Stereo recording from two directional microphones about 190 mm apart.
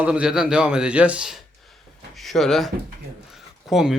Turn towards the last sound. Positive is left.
turn(degrees=0)  # may be behind; listen again after turning